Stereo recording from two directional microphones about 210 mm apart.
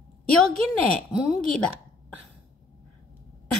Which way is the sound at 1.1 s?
Centre (ahead or behind).